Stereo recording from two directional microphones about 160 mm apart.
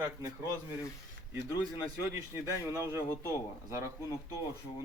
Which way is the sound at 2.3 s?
15° right (ahead or behind).